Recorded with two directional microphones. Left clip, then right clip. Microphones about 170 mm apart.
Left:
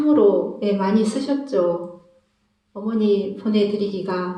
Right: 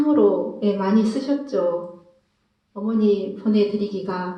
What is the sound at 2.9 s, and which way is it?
Speech, 40° left (ahead or behind).